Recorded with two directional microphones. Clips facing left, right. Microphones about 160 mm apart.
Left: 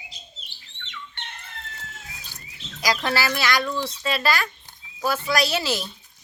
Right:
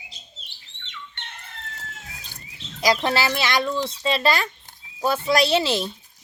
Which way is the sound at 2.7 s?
25° right (ahead or behind).